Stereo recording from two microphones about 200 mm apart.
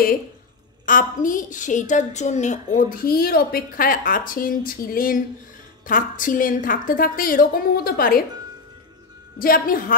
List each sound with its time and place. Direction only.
0.8 s a woman's voice: 40° left (ahead or behind)
9.4 s a woman's voice: 45° left (ahead or behind)